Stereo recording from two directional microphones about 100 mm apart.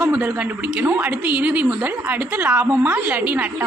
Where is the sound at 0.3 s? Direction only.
15° right (ahead or behind).